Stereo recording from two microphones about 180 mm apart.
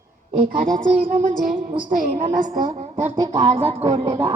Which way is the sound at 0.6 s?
50° right (ahead or behind).